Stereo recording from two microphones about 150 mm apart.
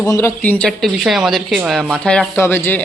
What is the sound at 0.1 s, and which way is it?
Speech, 15° left (ahead or behind).